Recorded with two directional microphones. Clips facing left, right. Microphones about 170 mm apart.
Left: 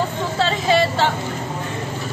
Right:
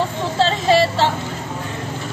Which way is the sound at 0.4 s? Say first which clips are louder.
Right 2 dB; 30° right (ahead or behind).